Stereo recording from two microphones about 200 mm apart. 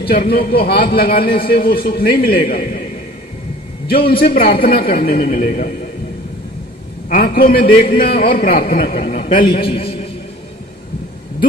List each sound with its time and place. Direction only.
0.1 s a man's voice: 50° left (ahead or behind)
4.1 s a man's voice: 50° left (ahead or behind)
7.1 s a man's voice: 45° left (ahead or behind)
9.4 s a man's voice: 25° left (ahead or behind)